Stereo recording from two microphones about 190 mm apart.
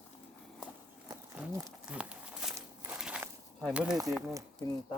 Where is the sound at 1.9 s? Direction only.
5° right (ahead or behind).